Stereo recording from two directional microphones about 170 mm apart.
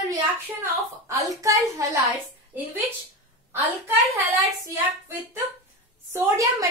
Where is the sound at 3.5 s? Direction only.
10° right (ahead or behind).